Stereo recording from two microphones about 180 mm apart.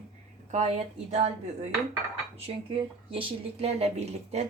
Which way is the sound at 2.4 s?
30° right (ahead or behind).